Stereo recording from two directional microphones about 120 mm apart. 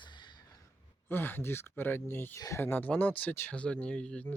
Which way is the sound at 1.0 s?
15° left (ahead or behind).